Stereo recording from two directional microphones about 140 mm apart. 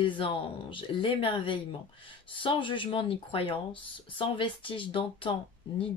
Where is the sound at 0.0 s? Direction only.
40° left (ahead or behind).